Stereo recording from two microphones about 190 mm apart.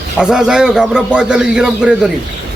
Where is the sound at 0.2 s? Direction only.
5° right (ahead or behind).